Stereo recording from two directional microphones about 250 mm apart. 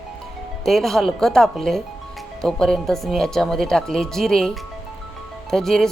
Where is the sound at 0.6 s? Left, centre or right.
Centre.